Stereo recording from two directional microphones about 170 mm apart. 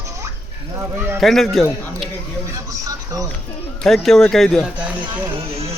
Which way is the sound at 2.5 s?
20° right (ahead or behind).